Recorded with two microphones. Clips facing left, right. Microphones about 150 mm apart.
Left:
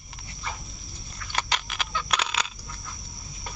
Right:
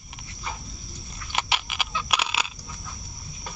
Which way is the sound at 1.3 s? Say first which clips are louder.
Right 1 dB; 10° right (ahead or behind).